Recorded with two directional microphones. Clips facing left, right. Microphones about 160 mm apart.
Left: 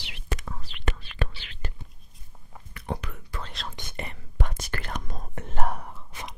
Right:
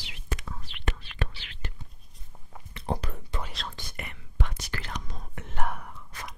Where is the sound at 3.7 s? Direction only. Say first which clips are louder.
Left 4 dB; 25° left (ahead or behind).